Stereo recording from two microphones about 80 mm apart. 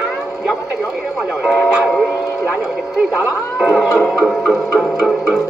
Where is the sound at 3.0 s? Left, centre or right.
Centre.